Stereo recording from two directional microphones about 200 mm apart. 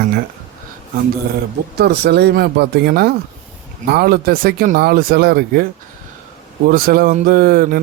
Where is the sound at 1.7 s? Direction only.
55° right (ahead or behind).